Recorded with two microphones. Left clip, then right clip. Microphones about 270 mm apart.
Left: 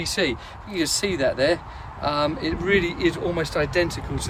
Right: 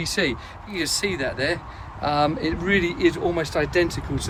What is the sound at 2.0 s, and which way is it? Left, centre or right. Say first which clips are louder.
Speech: right 2 dB; centre.